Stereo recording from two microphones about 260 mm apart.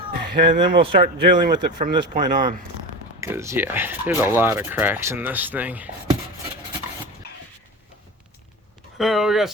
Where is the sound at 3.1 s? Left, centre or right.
Centre.